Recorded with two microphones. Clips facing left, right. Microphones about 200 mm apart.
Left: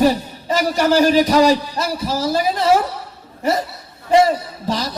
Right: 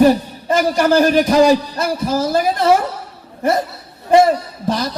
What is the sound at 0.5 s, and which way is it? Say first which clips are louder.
A man's voice: right 2 dB; 50° right (ahead or behind).